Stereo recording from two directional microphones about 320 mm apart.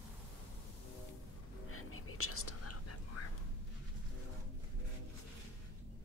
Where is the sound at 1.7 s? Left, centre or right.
Left.